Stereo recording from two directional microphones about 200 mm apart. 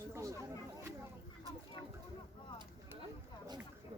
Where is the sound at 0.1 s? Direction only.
15° right (ahead or behind).